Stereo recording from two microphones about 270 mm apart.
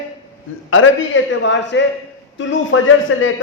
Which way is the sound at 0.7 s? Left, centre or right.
Left.